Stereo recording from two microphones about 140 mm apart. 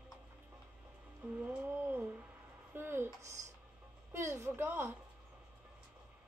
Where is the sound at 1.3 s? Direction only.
10° right (ahead or behind).